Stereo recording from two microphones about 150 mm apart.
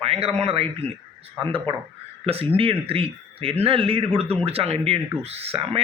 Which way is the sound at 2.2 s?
40° right (ahead or behind).